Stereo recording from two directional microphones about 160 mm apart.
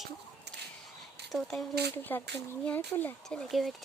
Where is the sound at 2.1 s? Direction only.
15° left (ahead or behind).